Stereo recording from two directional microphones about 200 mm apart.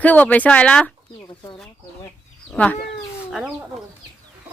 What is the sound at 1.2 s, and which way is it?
Speech, 20° left (ahead or behind).